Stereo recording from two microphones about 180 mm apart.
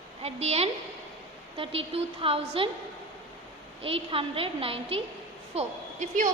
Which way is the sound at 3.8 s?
30° right (ahead or behind).